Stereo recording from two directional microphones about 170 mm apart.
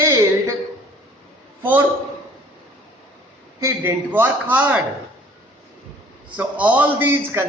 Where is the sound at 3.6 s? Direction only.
15° right (ahead or behind).